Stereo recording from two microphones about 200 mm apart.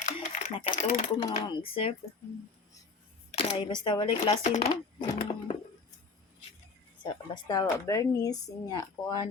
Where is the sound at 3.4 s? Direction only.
25° left (ahead or behind).